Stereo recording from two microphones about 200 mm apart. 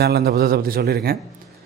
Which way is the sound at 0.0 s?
55° right (ahead or behind).